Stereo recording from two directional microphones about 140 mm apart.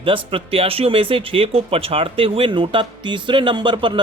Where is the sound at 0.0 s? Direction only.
40° right (ahead or behind).